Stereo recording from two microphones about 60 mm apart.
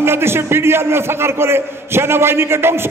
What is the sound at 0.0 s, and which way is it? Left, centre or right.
A man's voice, right.